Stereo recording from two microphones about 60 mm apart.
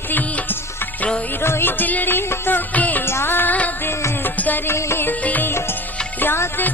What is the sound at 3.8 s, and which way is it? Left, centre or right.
Music, left.